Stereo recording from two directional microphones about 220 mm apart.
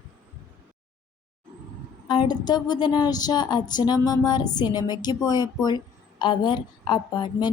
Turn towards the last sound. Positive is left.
turn(degrees=20)  # may be behind; listen again after turning